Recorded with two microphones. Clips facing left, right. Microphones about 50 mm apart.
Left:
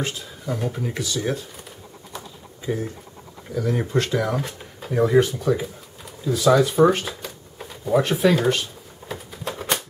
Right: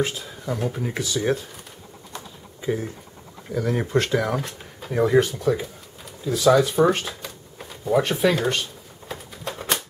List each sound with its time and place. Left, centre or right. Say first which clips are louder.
0.0 s speech: right 3 dB; centre
3.5 s speech: even; centre
9.1 s typing: left 2 dB; centre